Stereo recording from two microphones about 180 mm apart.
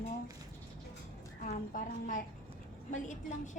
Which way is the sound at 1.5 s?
50° left (ahead or behind).